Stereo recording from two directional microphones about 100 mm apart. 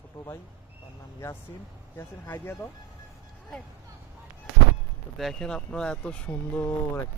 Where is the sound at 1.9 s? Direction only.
20° left (ahead or behind).